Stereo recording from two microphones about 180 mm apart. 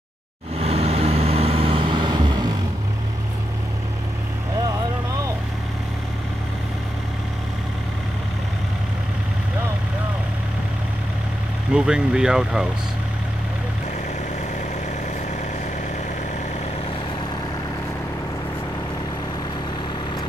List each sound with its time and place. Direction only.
0.6 s vehicle: 35° right (ahead or behind)
11.7 s speech: 5° right (ahead or behind)